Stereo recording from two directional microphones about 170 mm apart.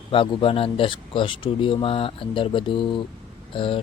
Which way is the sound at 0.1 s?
30° left (ahead or behind).